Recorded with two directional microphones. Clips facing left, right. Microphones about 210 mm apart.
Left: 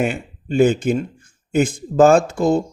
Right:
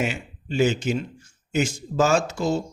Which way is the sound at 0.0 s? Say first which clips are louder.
Left 6 dB; 55° left (ahead or behind).